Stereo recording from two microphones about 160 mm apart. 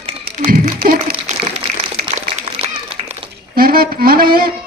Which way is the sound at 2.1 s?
40° right (ahead or behind).